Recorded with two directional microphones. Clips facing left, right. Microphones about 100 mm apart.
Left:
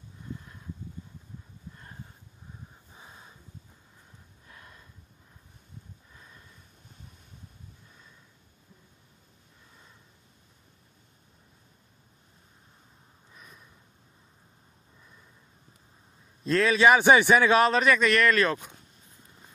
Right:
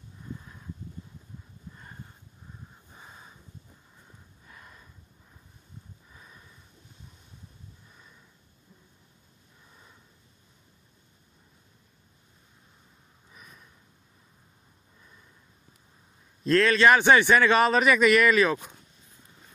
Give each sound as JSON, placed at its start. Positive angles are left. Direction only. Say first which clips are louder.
{"t": 3.0, "sound": "snort", "louder": "right 1 dB", "side_deg": 0}
{"t": 4.5, "sound": "gasp", "louder": "right 1 dB", "side_deg": 0}
{"t": 6.1, "sound": "snort", "louder": "right 2 dB", "side_deg": -5}
{"t": 13.3, "sound": "a sound", "louder": "even", "side_deg": 0}
{"t": 16.4, "sound": "a man's voice", "louder": "right 1 dB", "side_deg": 0}
{"t": 17.5, "sound": "speech", "louder": "even", "side_deg": 0}